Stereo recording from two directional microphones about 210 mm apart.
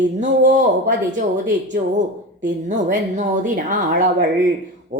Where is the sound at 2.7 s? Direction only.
35° right (ahead or behind).